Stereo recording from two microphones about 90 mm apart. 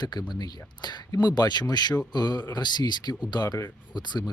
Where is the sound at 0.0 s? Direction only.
50° left (ahead or behind).